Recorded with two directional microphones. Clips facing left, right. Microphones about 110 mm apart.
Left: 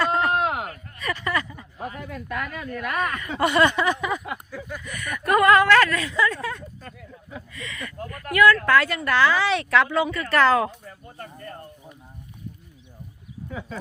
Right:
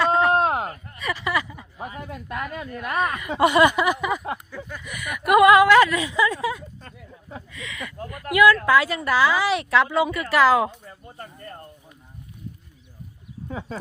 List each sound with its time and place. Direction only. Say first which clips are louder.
0.0 s a sound: right 3 dB; centre (ahead or behind)
0.3 s a sound: right 3 dB; 35° right (ahead or behind)
0.9 s speech: right 1 dB; 5° right (ahead or behind)
2.1 s a woman's voice: right 2 dB; 25° right (ahead or behind)
3.2 s a woman's voice: right 3 dB; 15° right (ahead or behind)
7.5 s speech: right 1 dB; centre (ahead or behind)
8.1 s speech: right 1 dB; 15° right (ahead or behind)
13.5 s speech: right 2 dB; 30° right (ahead or behind)